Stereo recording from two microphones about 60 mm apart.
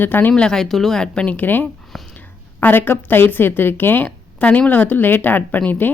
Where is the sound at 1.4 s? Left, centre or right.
Left.